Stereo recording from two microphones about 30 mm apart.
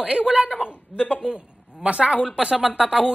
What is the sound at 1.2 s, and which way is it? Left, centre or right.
A woman's voice, right.